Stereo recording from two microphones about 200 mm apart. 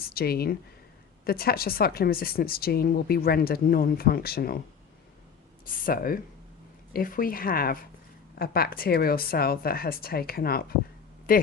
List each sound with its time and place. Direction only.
0.1 s speech: 50° left (ahead or behind)
5.6 s speech: 45° left (ahead or behind)